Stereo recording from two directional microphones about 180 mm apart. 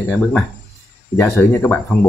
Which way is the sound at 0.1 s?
5° left (ahead or behind).